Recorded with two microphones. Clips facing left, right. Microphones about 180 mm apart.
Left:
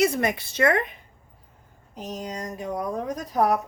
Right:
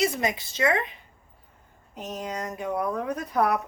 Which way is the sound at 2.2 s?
40° left (ahead or behind).